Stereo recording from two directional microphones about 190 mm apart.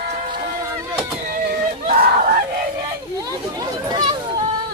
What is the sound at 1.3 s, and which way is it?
Vehicle, 50° right (ahead or behind).